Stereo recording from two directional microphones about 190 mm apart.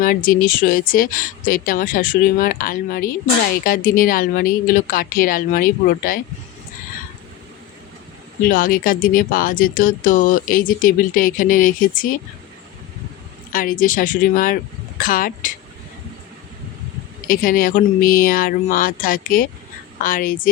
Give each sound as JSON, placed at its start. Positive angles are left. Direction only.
{"t": 0.0, "sound": "speech", "side_deg": 45}
{"t": 8.4, "sound": "speech", "side_deg": 50}
{"t": 13.5, "sound": "speech", "side_deg": 45}
{"t": 17.2, "sound": "speech", "side_deg": 50}